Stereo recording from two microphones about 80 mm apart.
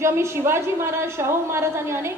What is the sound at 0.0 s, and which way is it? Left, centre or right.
A woman's voice, right.